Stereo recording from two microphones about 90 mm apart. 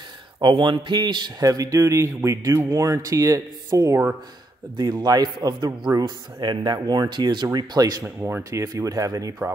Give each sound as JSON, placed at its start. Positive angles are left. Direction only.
{"t": 0.4, "sound": "a man's voice", "side_deg": -60}
{"t": 1.4, "sound": "speech", "side_deg": -40}
{"t": 4.7, "sound": "speech", "side_deg": -50}
{"t": 8.2, "sound": "speech", "side_deg": -25}
{"t": 8.5, "sound": "speech", "side_deg": -35}